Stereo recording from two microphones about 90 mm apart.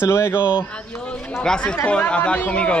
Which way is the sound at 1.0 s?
10° left (ahead or behind).